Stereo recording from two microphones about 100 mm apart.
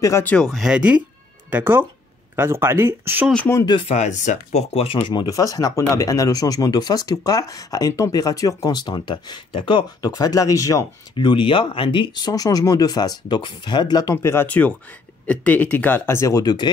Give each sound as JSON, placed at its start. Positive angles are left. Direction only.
{"t": 0.2, "sound": "speech", "side_deg": 15}
{"t": 0.5, "sound": "speech", "side_deg": 0}
{"t": 0.7, "sound": "speech", "side_deg": -15}
{"t": 4.5, "sound": "speech", "side_deg": 85}
{"t": 10.1, "sound": "speech", "side_deg": 40}
{"t": 11.1, "sound": "speech", "side_deg": 55}
{"t": 14.1, "sound": "speech", "side_deg": 25}